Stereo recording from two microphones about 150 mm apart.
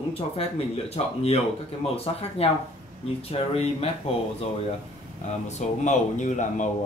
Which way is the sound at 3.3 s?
40° left (ahead or behind).